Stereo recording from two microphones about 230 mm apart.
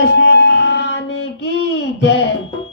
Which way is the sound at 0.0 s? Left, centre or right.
Left.